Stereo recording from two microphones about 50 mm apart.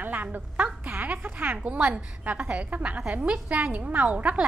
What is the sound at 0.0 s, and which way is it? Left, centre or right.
Speech, right.